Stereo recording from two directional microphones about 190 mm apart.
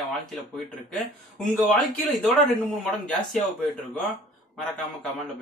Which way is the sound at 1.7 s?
Centre (ahead or behind).